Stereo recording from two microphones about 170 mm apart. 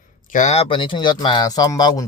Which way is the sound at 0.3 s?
40° left (ahead or behind).